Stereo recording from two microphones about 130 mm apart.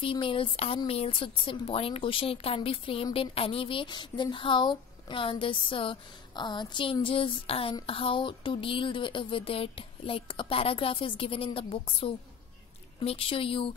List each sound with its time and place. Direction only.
0.0 s a woman's voice: 40° left (ahead or behind)